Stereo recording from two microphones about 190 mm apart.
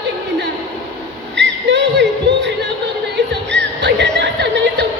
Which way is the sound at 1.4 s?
65° right (ahead or behind).